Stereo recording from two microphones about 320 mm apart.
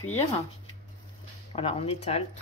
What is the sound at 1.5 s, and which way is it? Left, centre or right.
Speech, centre.